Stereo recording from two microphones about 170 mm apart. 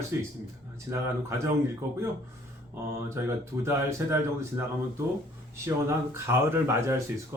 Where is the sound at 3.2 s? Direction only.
15° right (ahead or behind).